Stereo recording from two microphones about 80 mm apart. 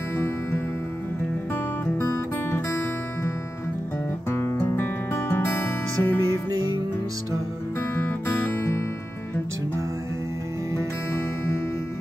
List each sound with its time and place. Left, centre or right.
2.1 s music: left
4.3 s music: left
7.9 s music: left